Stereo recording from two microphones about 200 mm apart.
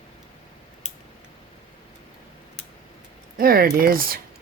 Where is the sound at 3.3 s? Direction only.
45° right (ahead or behind).